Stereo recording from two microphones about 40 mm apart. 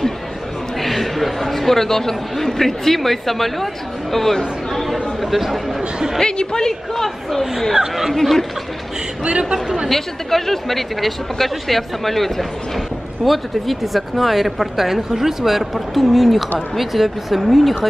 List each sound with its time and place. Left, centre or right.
0.7 s a man's voice: centre
5.2 s speech: centre
6.1 s a man's voice: centre
7.9 s speech: centre
8.2 s a man's voice: centre
9.2 s speech: right
9.8 s speech: centre